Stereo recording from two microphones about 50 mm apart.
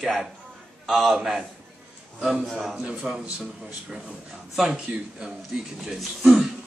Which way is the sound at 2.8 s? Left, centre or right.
Centre.